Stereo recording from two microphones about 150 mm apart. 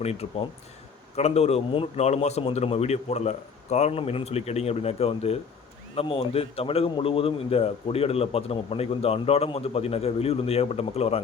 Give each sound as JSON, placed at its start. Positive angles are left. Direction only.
{"t": 0.0, "sound": "a man's voice", "side_deg": 45}